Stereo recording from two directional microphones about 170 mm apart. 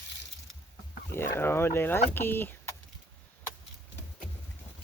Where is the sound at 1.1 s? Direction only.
15° left (ahead or behind).